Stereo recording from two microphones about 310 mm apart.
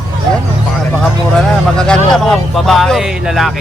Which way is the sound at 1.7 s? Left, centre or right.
Centre.